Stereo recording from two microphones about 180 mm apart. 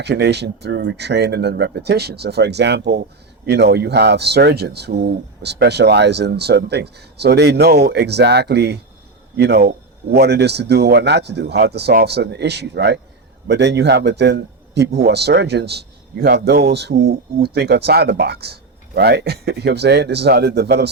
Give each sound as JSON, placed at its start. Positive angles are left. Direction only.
{"t": 0.0, "sound": "speech", "side_deg": -65}